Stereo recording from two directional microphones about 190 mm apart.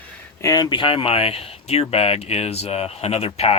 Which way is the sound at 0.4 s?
20° left (ahead or behind).